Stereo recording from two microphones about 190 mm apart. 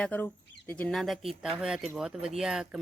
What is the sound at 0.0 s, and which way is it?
Speech, 10° left (ahead or behind).